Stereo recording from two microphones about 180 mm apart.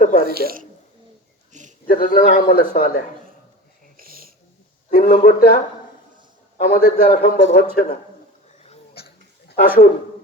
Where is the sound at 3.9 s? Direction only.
55° right (ahead or behind).